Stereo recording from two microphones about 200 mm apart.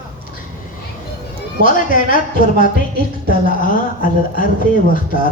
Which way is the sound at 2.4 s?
45° left (ahead or behind).